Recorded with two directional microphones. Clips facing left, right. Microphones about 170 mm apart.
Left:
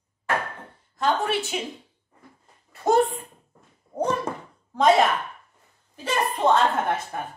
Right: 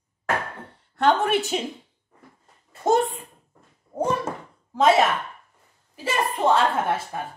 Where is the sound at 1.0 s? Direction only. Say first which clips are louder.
Right 4 dB; 55° right (ahead or behind).